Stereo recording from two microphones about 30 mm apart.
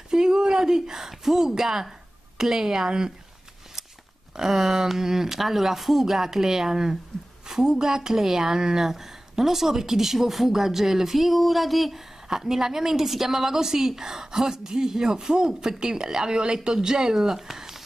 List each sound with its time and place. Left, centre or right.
0.1 s a sound: centre
0.5 s a woman's voice: centre
4.4 s a woman's voice: centre
12.3 s a woman's voice: centre